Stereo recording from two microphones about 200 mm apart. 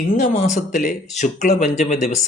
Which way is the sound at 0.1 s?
40° left (ahead or behind).